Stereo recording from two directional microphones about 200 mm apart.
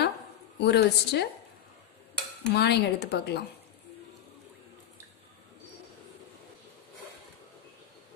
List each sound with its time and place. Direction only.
0.6 s speech: 55° left (ahead or behind)
2.5 s speech: 55° left (ahead or behind)